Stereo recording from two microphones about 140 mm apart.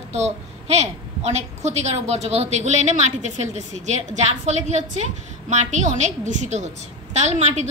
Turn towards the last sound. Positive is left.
turn(degrees=-55)  # may be behind; listen again after turning